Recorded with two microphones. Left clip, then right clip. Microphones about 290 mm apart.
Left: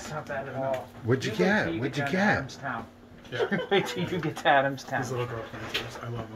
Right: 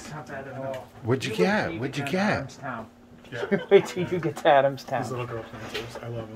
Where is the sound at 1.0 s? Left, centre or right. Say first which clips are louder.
Right 2 dB; centre.